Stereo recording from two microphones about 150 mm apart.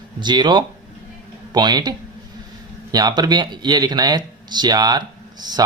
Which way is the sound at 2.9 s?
25° right (ahead or behind).